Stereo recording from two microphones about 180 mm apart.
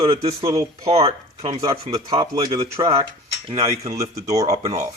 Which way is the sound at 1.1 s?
30° right (ahead or behind).